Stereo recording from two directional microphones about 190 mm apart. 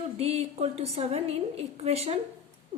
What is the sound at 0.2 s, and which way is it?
A woman's voice, 30° right (ahead or behind).